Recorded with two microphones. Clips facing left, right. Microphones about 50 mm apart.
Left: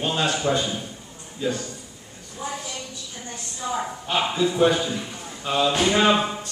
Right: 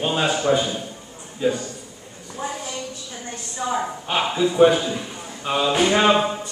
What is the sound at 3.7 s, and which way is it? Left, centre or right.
Speech, centre.